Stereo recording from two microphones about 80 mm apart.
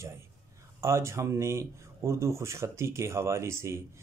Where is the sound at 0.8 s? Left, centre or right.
Right.